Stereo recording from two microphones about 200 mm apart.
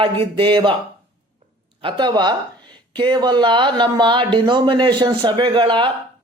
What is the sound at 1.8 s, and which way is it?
Speech, 25° right (ahead or behind).